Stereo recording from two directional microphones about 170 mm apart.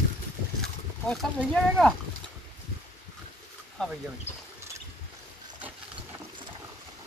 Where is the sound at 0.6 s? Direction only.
Centre (ahead or behind).